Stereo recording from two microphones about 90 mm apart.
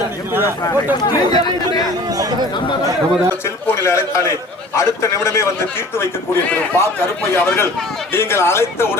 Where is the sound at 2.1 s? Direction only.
45° right (ahead or behind).